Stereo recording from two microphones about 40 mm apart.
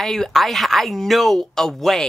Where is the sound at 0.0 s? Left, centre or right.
Centre.